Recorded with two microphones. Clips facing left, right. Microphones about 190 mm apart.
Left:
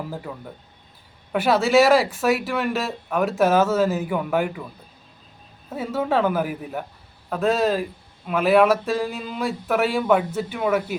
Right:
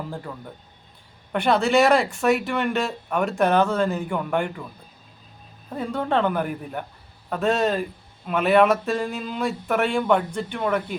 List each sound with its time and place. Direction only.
0.1 s speech: 5° left (ahead or behind)
5.7 s speech: 5° left (ahead or behind)